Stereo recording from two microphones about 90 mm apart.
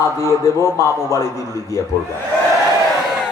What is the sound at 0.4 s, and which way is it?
Speech, 35° left (ahead or behind).